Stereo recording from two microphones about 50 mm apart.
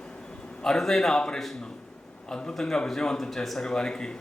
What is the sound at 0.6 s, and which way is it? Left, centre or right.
Speech, centre.